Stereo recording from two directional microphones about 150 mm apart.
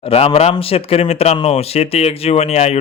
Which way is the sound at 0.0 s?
40° left (ahead or behind).